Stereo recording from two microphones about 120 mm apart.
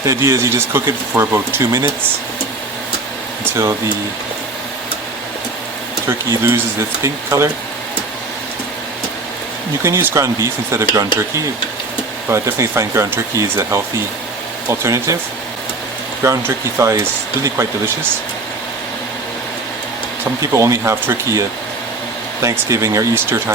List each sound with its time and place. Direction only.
0.0 s speech: 25° right (ahead or behind)
3.4 s speech: 20° right (ahead or behind)
6.1 s speech: 20° right (ahead or behind)
9.8 s speech: 20° right (ahead or behind)
12.3 s speech: 20° right (ahead or behind)
16.2 s speech: 20° right (ahead or behind)
20.4 s speech: 25° right (ahead or behind)